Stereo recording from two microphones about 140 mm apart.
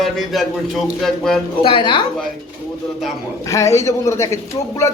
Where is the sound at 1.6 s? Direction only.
40° left (ahead or behind).